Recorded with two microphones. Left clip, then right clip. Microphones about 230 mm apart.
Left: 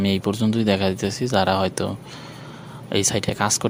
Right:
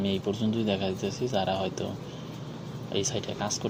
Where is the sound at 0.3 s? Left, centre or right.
Left.